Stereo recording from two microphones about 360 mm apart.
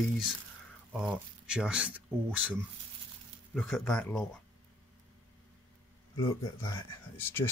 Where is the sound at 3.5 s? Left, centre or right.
Centre.